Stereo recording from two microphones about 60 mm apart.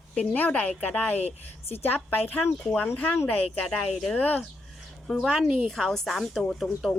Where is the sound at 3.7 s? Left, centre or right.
Centre.